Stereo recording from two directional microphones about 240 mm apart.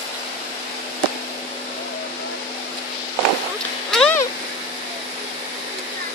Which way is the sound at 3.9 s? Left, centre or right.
Centre.